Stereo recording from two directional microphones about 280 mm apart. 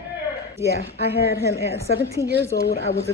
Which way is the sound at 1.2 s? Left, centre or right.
Left.